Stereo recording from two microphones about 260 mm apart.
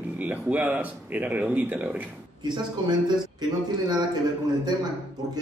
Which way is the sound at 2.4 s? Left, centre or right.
Centre.